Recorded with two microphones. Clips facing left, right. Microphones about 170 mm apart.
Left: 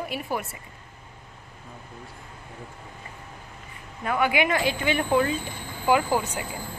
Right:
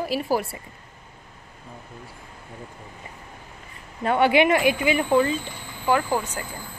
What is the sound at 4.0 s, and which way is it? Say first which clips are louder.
Speech: right 5 dB; 30° right (ahead or behind).